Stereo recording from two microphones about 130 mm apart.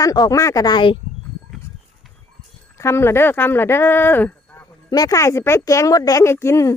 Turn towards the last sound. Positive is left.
turn(degrees=25)  # may be behind; listen again after turning